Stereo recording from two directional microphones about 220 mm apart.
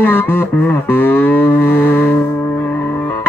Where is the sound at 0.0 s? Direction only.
10° left (ahead or behind).